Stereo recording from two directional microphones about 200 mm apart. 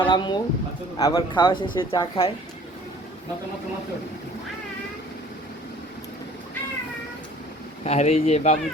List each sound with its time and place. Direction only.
0.0 s speech: 20° left (ahead or behind)
7.9 s speech: 35° left (ahead or behind)